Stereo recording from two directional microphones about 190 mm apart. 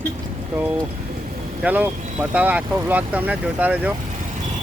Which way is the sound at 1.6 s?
10° right (ahead or behind).